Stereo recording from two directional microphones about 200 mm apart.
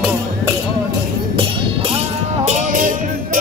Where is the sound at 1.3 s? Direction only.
30° right (ahead or behind).